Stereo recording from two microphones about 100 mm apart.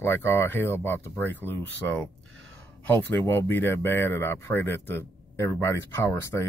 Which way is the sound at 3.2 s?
25° left (ahead or behind).